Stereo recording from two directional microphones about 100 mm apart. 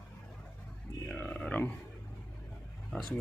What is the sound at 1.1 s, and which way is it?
Grunt, 10° left (ahead or behind).